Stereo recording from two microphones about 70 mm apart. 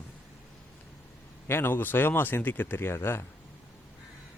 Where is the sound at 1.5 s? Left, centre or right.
Left.